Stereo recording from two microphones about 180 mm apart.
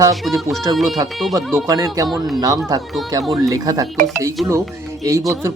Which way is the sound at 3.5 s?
20° right (ahead or behind).